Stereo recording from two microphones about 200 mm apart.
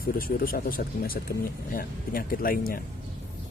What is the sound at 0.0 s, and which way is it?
Speech, 45° left (ahead or behind).